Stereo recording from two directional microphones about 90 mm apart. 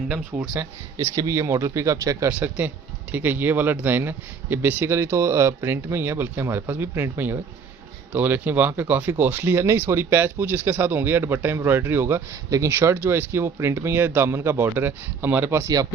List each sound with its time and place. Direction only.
0.6 s speech: 35° right (ahead or behind)
2.4 s speech: 20° right (ahead or behind)